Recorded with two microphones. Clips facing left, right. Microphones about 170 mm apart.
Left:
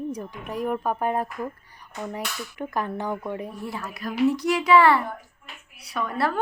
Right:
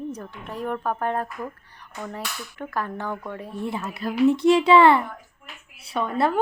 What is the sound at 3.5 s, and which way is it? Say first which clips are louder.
A child's voice: right 4 dB; 25° right (ahead or behind).